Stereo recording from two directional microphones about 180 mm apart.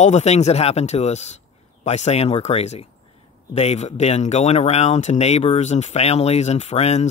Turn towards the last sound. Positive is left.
turn(degrees=40)  # may be behind; listen again after turning